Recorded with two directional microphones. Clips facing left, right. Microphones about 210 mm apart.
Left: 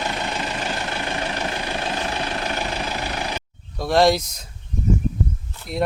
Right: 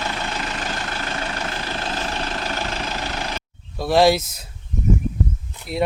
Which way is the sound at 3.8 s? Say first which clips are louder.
Right 1 dB; 5° right (ahead or behind).